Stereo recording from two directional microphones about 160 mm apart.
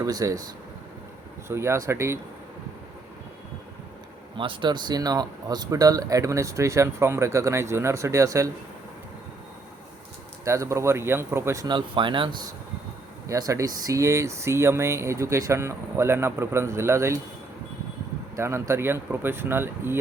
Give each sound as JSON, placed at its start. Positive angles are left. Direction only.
{"t": 0.0, "sound": "speech", "side_deg": -20}
{"t": 1.5, "sound": "speech", "side_deg": -15}
{"t": 4.4, "sound": "speech", "side_deg": -30}
{"t": 10.4, "sound": "speech", "side_deg": -20}
{"t": 13.2, "sound": "speech", "side_deg": -20}
{"t": 18.3, "sound": "speech", "side_deg": -15}